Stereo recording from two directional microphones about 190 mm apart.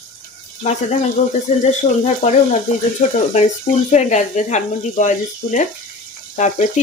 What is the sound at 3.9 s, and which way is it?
Speech, 40° left (ahead or behind).